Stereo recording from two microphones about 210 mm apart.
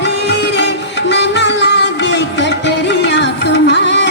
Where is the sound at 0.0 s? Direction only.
55° left (ahead or behind).